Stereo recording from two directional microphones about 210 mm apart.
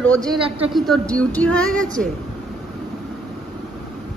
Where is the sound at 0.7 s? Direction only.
Centre (ahead or behind).